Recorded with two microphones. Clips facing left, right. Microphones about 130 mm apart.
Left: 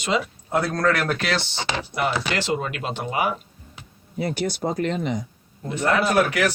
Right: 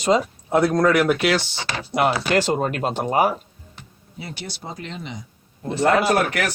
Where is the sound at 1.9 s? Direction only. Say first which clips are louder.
Right 7 dB; 50° right (ahead or behind).